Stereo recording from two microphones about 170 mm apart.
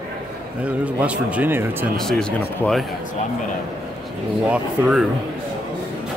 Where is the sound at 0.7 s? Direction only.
5° right (ahead or behind).